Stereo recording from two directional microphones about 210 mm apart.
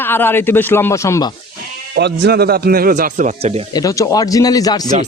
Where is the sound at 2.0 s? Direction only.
55° right (ahead or behind); by 3.6 s 35° right (ahead or behind).